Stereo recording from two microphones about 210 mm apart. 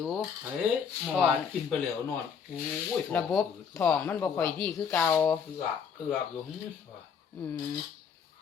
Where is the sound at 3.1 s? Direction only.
10° left (ahead or behind).